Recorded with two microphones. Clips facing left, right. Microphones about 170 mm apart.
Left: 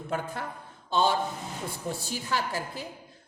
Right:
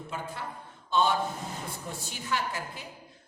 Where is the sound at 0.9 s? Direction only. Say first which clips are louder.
Left 1 dB; 35° left (ahead or behind).